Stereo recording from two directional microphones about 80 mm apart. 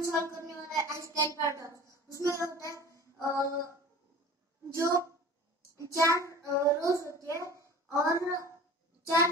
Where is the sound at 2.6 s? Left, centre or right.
Left.